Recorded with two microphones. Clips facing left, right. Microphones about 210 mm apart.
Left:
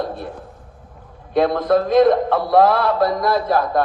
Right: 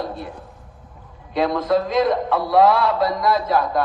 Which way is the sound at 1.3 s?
55° left (ahead or behind).